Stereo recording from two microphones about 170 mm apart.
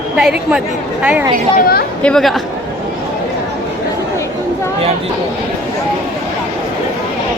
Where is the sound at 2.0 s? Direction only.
5° left (ahead or behind).